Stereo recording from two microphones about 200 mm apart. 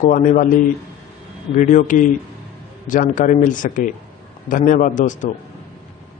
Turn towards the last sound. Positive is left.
turn(degrees=40)  # may be behind; listen again after turning